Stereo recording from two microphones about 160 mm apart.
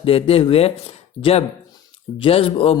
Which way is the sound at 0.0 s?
35° left (ahead or behind).